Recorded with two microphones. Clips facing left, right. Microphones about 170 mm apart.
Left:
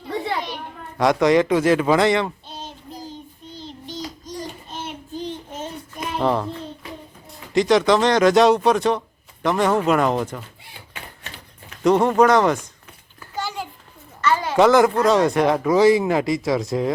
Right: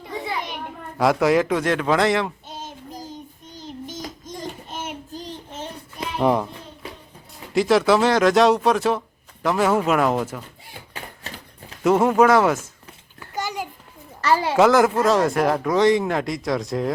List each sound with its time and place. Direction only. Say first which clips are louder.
0.9 s speech: left 2 dB; 5° right (ahead or behind)
2.5 s child singing: even; 45° right (ahead or behind)
6.1 s a child's voice: right 1 dB; 10° right (ahead or behind)
7.5 s speech: left 1 dB; 5° right (ahead or behind)
11.8 s speech: left 1 dB; 5° right (ahead or behind)
14.2 s a sound: right 1 dB; 35° right (ahead or behind)
14.5 s speech: left 2 dB; centre (ahead or behind)